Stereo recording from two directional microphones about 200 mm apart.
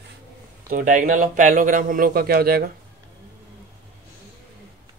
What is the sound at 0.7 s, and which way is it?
Speech, 45° right (ahead or behind).